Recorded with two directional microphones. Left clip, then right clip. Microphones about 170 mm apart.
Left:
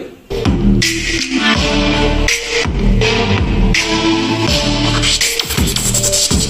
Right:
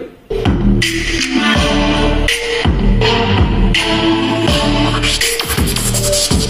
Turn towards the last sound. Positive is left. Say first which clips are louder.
# right 1 dB
turn(degrees=15)  # may be behind; listen again after turning